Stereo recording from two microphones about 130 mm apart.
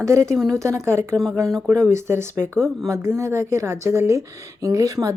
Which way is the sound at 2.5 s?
5° left (ahead or behind).